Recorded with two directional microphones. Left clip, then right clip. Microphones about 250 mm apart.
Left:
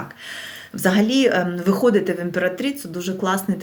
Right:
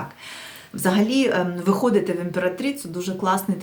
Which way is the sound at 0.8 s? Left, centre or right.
Centre.